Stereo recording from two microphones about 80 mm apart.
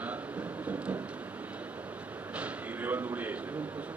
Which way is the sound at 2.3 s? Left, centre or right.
Centre.